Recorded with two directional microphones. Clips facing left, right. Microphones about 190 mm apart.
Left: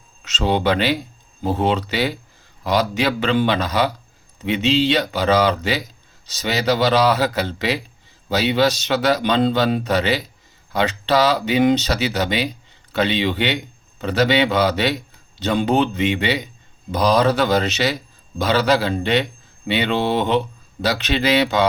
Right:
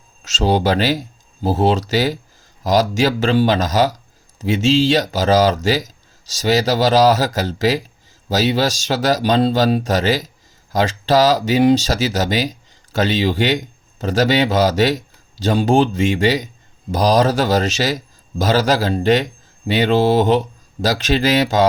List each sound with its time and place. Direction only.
0.2 s a man's voice: 40° right (ahead or behind)